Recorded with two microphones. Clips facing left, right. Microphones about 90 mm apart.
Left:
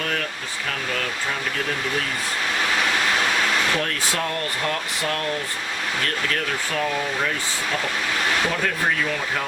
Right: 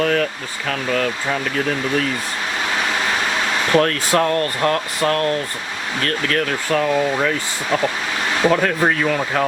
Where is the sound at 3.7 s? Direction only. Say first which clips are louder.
Right 9 dB; 60° right (ahead or behind).